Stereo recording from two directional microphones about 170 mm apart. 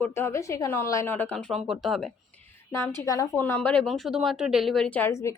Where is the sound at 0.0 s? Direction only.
15° left (ahead or behind).